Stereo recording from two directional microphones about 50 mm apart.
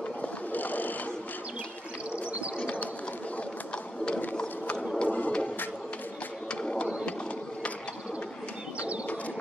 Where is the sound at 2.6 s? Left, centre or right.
Left.